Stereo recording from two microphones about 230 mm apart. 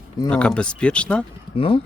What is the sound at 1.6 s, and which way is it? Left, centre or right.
Speech, left.